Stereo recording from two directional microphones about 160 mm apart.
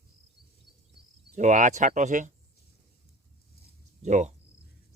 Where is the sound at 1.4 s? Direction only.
50° right (ahead or behind).